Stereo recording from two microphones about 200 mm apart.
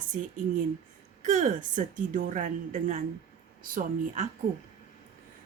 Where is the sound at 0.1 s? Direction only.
40° right (ahead or behind).